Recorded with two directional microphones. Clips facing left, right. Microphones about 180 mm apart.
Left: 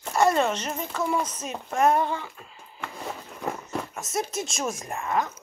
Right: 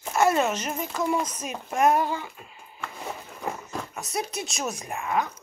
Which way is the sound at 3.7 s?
Centre (ahead or behind).